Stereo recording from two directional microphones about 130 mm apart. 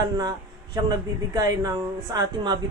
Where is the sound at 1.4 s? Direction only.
30° right (ahead or behind).